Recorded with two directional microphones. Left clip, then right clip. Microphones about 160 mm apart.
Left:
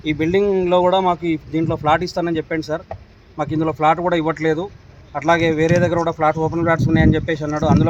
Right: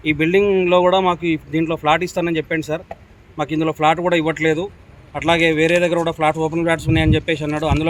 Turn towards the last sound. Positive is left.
turn(degrees=-20)  # may be behind; listen again after turning